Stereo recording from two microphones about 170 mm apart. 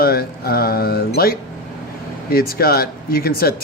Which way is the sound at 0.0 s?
60° left (ahead or behind).